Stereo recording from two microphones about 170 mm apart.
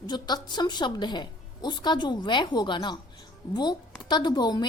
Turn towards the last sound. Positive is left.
turn(degrees=25)  # may be behind; listen again after turning